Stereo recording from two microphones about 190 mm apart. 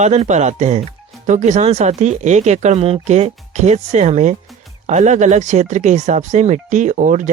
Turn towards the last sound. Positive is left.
turn(degrees=-40)  # may be behind; listen again after turning